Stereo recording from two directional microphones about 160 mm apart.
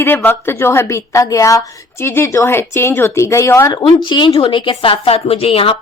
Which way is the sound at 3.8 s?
30° left (ahead or behind).